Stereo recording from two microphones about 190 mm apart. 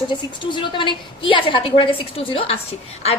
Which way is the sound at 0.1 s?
25° left (ahead or behind).